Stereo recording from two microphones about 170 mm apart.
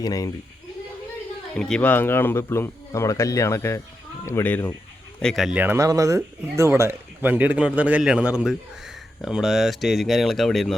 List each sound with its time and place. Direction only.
0.0 s speech: 20° left (ahead or behind)
1.5 s speech: 5° left (ahead or behind)
5.2 s speech: centre (ahead or behind)